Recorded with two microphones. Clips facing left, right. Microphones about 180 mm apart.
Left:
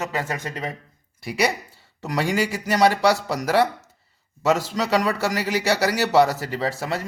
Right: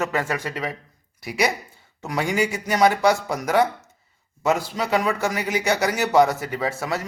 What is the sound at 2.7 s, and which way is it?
Speech, 70° left (ahead or behind).